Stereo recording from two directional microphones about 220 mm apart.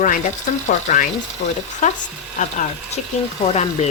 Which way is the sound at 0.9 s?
35° left (ahead or behind).